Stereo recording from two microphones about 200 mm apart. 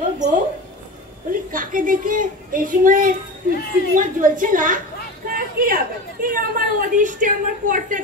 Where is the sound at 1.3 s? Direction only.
45° right (ahead or behind).